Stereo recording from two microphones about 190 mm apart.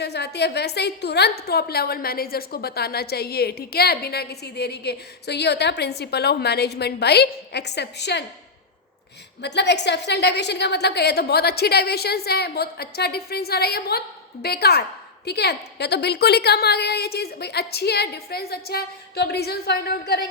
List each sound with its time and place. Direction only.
0.0 s a woman's voice: 60° left (ahead or behind)
9.4 s a woman's voice: 65° left (ahead or behind)